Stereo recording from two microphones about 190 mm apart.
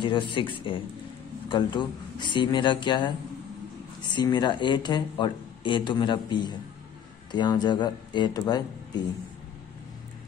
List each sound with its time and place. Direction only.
0.0 s speech: 25° left (ahead or behind)
4.1 s speech: 25° left (ahead or behind)